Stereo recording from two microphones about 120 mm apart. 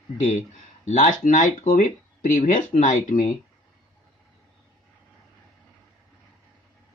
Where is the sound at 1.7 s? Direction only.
90° left; by 3.2 s 70° left (ahead or behind).